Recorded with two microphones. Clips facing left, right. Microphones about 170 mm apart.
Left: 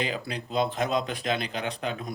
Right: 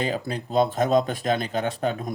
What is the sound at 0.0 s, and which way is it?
Speech, 45° right (ahead or behind).